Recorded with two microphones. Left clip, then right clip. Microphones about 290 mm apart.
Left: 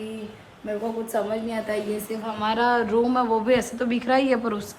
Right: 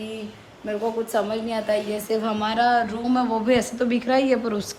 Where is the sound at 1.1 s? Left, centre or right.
Centre.